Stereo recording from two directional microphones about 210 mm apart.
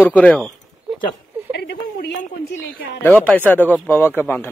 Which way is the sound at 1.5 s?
50° left (ahead or behind).